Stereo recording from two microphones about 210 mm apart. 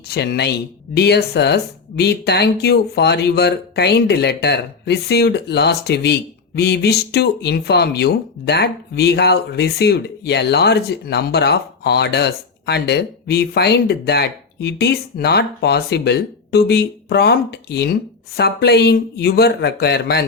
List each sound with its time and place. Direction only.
0.1 s speech: 50° left (ahead or behind)